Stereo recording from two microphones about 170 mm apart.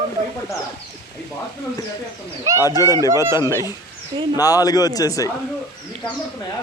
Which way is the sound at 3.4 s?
15° left (ahead or behind).